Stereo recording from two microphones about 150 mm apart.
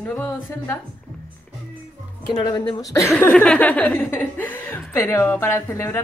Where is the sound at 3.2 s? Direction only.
10° left (ahead or behind).